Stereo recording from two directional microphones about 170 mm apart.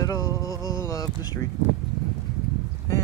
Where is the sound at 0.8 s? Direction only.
20° left (ahead or behind).